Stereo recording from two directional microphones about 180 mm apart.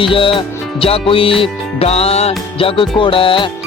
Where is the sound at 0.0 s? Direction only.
30° left (ahead or behind).